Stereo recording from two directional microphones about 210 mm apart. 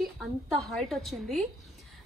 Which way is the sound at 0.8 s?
Centre (ahead or behind).